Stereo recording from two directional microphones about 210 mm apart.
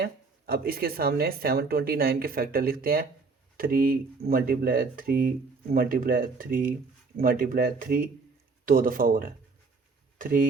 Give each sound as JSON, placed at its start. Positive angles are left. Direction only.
{"t": 0.0, "sound": "speech", "side_deg": -45}